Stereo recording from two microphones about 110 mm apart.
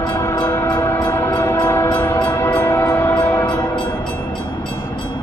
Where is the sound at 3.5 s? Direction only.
40° left (ahead or behind).